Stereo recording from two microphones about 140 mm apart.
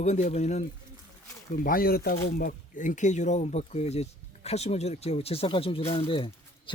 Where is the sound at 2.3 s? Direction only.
70° left (ahead or behind).